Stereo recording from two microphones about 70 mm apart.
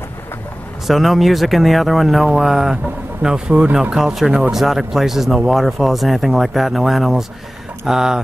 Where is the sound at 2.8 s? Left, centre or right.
Right.